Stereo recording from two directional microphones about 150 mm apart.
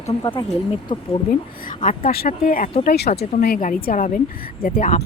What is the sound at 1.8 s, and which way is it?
Speech, 80° left.